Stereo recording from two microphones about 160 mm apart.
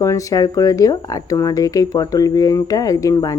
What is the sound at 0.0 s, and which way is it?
Speech, 20° left (ahead or behind).